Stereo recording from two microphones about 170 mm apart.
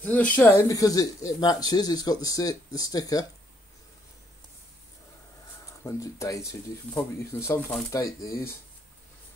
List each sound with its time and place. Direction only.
0.0 s speech: 10° left (ahead or behind)
5.9 s speech: 20° left (ahead or behind)